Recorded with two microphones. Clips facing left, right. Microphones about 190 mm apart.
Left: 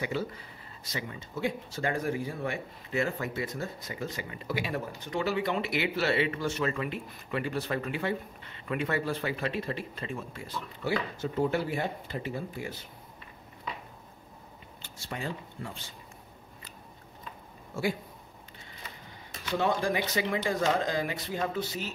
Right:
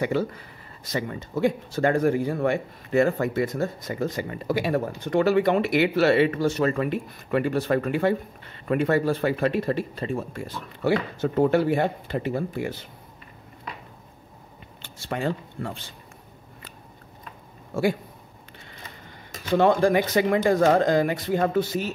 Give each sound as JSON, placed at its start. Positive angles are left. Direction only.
{"t": 0.8, "sound": "speech", "side_deg": -50}
{"t": 10.8, "sound": "speech", "side_deg": -65}
{"t": 14.8, "sound": "speech", "side_deg": -75}
{"t": 19.5, "sound": "speech", "side_deg": -60}